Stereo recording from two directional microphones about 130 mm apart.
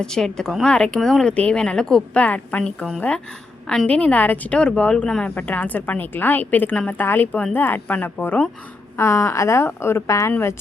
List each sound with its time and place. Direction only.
0.0 s a woman's voice: 5° left (ahead or behind); by 10.5 s 20° left (ahead or behind)